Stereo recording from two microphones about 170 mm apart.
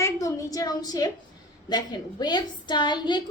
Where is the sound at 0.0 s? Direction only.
20° left (ahead or behind).